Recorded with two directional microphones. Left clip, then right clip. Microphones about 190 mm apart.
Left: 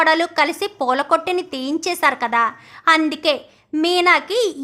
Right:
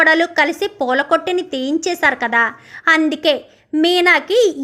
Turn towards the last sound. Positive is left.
turn(degrees=-10)  # may be behind; listen again after turning